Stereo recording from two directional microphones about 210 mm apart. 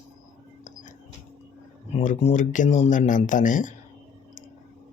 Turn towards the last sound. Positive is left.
turn(degrees=40)  # may be behind; listen again after turning